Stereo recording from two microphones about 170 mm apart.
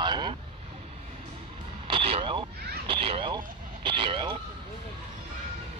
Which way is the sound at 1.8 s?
30° right (ahead or behind).